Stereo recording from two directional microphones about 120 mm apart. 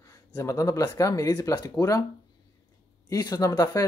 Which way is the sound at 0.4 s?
25° left (ahead or behind).